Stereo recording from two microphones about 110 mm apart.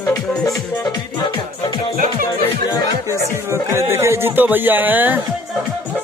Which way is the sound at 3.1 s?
25° right (ahead or behind).